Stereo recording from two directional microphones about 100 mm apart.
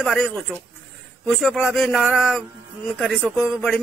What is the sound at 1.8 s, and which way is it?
A man's voice, 5° left (ahead or behind).